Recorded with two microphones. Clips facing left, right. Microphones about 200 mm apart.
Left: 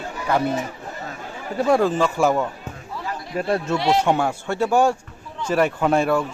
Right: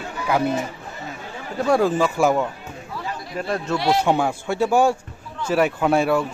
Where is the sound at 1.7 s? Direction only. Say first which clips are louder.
Even; 5° right (ahead or behind).